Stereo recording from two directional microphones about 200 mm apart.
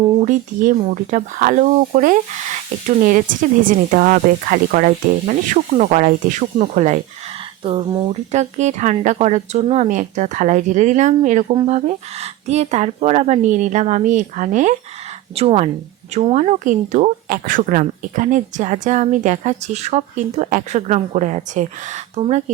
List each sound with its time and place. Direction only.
0.2 s speech: 40° right (ahead or behind)